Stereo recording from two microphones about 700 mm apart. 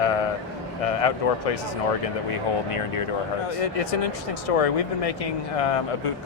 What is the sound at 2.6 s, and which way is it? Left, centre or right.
Speech, left.